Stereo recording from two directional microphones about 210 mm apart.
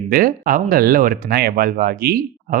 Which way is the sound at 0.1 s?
45° right (ahead or behind).